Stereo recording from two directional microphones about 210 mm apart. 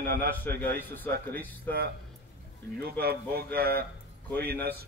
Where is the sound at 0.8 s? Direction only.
10° left (ahead or behind).